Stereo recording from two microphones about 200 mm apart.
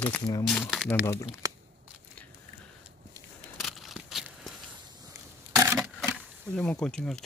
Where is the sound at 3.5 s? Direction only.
Centre (ahead or behind).